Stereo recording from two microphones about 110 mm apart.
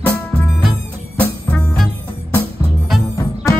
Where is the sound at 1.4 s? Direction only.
Centre (ahead or behind).